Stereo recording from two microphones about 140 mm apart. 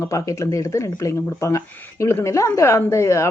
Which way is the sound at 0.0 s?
20° left (ahead or behind).